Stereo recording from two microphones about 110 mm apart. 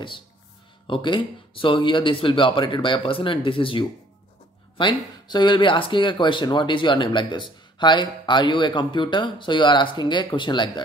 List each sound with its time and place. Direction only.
0.8 s speech: 45° left (ahead or behind)